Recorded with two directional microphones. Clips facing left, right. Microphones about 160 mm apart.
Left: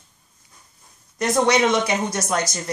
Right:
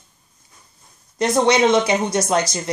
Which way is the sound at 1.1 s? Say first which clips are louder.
Right 2 dB; 25° right (ahead or behind).